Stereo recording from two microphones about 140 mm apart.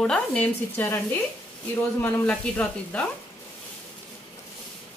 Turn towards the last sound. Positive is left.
turn(degrees=10)  # may be behind; listen again after turning